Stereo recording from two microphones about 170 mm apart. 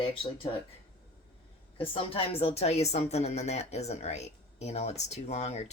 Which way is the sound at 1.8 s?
35° left (ahead or behind).